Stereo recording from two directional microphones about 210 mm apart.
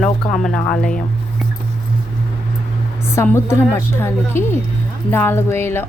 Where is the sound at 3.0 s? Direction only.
10° left (ahead or behind).